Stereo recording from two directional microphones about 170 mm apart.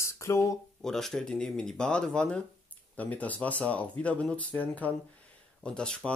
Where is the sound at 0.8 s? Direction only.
5° left (ahead or behind).